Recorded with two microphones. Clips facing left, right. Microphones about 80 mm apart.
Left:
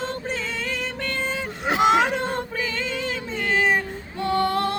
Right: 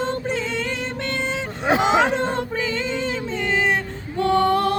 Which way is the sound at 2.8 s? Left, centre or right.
Right.